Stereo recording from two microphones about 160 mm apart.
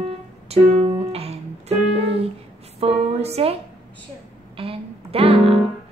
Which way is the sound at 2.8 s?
40° right (ahead or behind).